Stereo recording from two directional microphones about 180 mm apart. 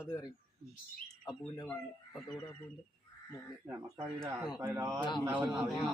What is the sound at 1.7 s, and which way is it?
Speech, centre (ahead or behind).